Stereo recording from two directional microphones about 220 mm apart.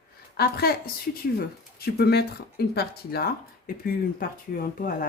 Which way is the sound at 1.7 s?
45° left (ahead or behind).